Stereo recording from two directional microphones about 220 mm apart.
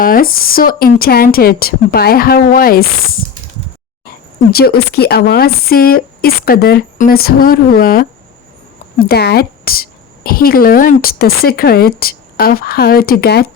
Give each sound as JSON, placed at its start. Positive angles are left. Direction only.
{"t": 0.0, "sound": "a woman's voice", "side_deg": 40}
{"t": 4.5, "sound": "a woman's voice", "side_deg": 45}